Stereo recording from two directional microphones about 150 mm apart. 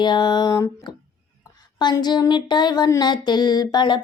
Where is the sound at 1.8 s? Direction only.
30° left (ahead or behind).